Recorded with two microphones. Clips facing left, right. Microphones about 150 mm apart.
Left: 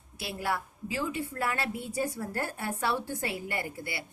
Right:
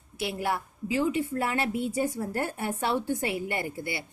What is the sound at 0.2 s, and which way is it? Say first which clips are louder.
A woman's voice: right 3 dB; 20° right (ahead or behind).